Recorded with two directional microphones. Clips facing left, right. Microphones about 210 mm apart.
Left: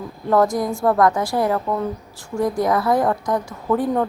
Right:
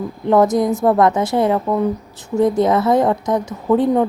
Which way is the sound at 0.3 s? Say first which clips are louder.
Right 4 dB; 20° right (ahead or behind).